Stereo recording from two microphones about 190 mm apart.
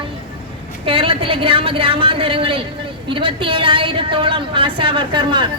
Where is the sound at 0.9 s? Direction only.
30° right (ahead or behind).